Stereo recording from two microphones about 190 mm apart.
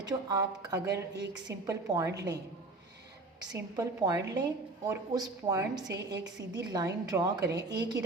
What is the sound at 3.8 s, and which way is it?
A woman's voice, 20° right (ahead or behind).